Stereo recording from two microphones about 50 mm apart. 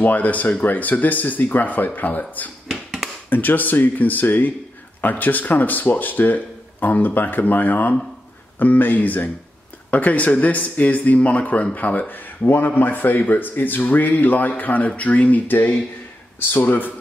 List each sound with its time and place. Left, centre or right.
0.0 s speech: left